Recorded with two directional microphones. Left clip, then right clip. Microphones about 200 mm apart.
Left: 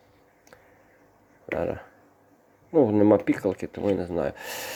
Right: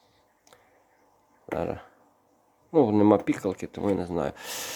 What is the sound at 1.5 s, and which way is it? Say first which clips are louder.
Speech: left 2 dB; 15° right (ahead or behind).